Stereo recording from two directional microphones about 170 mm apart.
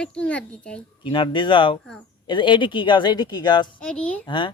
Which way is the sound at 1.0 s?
30° left (ahead or behind).